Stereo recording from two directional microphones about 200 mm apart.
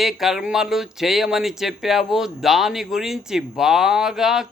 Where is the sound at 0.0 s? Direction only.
Centre (ahead or behind).